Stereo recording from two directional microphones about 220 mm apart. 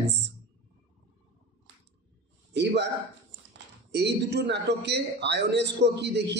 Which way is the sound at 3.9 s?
50° right (ahead or behind).